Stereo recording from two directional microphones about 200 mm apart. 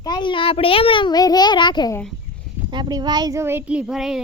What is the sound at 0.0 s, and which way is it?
A child's voice, 20° left (ahead or behind).